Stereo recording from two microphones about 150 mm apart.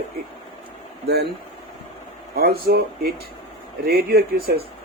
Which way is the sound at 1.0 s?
90° right.